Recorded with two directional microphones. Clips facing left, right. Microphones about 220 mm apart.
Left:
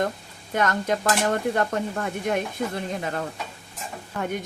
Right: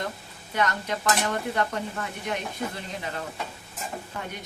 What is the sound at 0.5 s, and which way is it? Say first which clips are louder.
Speech: left 4 dB; 50° left (ahead or behind).